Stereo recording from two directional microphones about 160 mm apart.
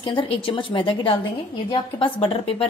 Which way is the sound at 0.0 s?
35° left (ahead or behind).